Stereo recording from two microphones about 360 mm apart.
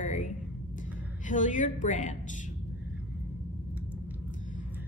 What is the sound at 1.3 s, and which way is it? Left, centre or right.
Speech, left.